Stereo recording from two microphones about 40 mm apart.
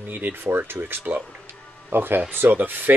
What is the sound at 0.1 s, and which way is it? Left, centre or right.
Speech, right.